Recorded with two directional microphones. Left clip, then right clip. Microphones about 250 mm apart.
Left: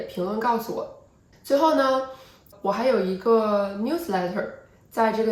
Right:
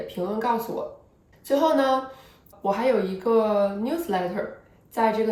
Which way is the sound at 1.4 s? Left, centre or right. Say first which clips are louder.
Left 1 dB; centre.